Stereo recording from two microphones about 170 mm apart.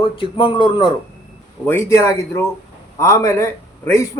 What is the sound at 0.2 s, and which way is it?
Speech, 30° left (ahead or behind).